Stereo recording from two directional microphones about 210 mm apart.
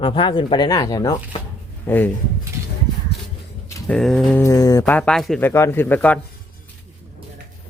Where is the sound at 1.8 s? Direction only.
10° left (ahead or behind).